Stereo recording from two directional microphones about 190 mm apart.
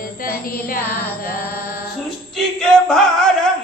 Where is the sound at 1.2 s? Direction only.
50° left (ahead or behind).